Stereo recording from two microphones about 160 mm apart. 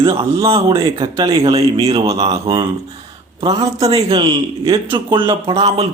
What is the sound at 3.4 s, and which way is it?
Speech, 40° right (ahead or behind).